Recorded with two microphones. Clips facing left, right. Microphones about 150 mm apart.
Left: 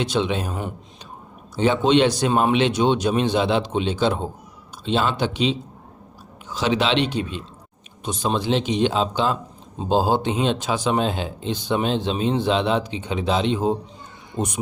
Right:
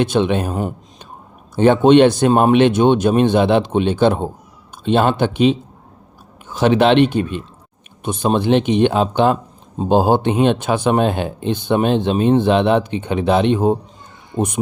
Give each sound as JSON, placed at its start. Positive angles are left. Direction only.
{"t": 0.0, "sound": "speech", "side_deg": -55}